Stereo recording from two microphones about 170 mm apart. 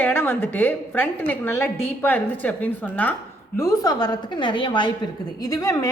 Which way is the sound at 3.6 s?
20° left (ahead or behind).